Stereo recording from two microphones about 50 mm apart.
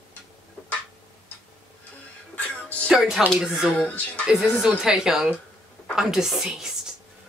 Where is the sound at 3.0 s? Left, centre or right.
Centre.